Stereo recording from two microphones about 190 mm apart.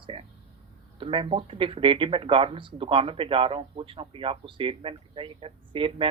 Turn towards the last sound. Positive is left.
turn(degrees=-30)  # may be behind; listen again after turning